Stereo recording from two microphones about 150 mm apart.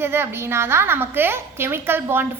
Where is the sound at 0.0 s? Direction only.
15° right (ahead or behind).